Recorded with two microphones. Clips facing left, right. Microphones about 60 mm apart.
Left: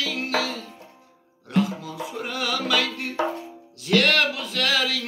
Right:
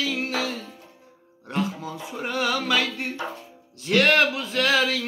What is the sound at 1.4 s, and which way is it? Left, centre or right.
Music, right.